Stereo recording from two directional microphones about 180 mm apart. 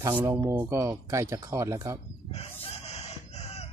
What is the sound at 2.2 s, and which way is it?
Chicken, 35° left (ahead or behind).